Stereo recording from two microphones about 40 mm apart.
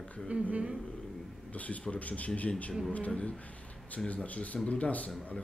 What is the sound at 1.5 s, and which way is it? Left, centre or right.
Speech, left.